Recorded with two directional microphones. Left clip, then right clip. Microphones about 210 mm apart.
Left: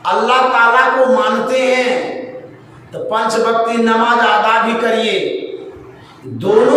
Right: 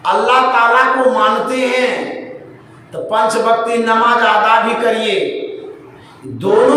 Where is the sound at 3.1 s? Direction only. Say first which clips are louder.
Right 1 dB; 10° right (ahead or behind).